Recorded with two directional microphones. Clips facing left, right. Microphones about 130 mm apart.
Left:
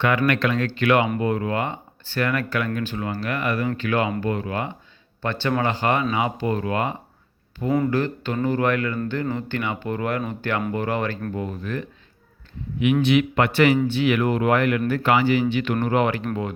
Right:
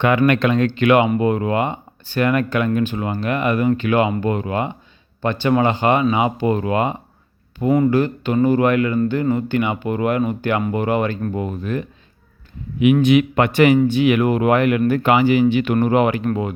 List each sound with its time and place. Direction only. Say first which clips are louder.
0.0 s speech: right 5 dB; 20° right (ahead or behind)